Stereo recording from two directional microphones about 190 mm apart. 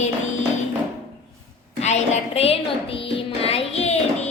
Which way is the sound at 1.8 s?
35° left (ahead or behind).